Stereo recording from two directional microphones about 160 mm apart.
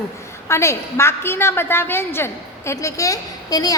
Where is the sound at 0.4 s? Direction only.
15° left (ahead or behind).